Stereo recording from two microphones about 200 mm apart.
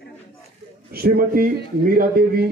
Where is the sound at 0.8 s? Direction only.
50° right (ahead or behind).